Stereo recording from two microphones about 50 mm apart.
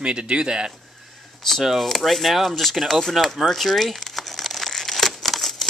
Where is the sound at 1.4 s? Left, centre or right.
Centre.